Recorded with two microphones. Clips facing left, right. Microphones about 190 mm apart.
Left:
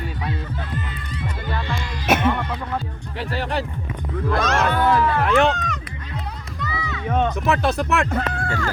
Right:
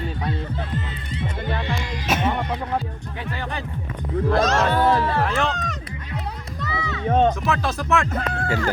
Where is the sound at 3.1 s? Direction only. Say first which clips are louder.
Left 6 dB; 75° left (ahead or behind).